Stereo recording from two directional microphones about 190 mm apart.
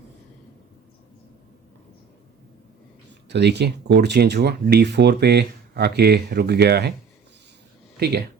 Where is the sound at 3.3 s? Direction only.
65° right (ahead or behind).